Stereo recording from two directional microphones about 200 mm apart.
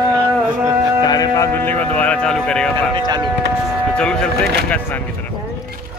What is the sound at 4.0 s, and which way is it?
Speech, 5° left (ahead or behind).